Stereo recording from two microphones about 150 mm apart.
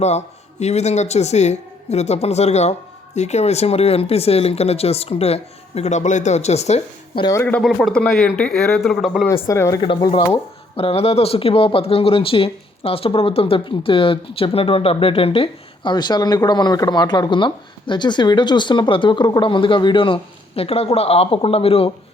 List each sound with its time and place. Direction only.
0.0 s speech: 50° left (ahead or behind)
7.2 s speech: 20° left (ahead or behind)
7.4 s a man's voice: 5° left (ahead or behind)
9.2 s speech: 15° left (ahead or behind)
9.8 s speech: 35° left (ahead or behind)